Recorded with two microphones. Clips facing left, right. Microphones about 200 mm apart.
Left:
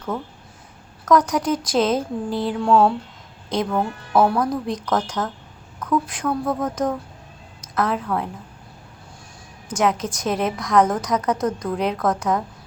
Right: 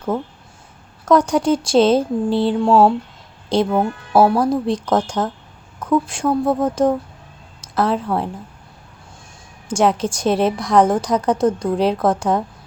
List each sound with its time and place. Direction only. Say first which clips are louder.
1.0 s a woman's voice: right 3 dB; 30° right (ahead or behind)
9.6 s a woman's voice: right 4 dB; 30° right (ahead or behind)